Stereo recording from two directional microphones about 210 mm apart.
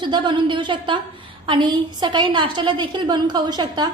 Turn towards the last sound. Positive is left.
turn(degrees=-20)  # may be behind; listen again after turning